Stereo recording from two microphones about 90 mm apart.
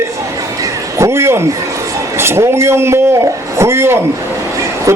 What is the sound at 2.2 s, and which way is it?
Speech, 30° right (ahead or behind).